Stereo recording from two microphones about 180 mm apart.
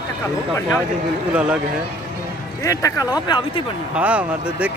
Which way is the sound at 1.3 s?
5° right (ahead or behind).